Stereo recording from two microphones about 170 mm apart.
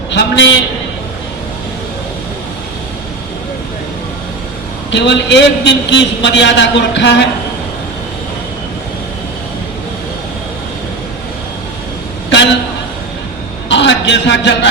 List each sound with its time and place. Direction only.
0.1 s a man's voice: 90° left
4.9 s a man's voice: 90° left
13.7 s a man's voice: 90° left